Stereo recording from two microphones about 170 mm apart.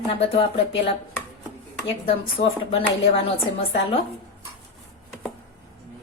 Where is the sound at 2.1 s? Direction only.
35° left (ahead or behind).